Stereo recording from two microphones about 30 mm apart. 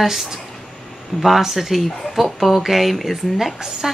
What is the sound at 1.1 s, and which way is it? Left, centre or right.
Speech, centre.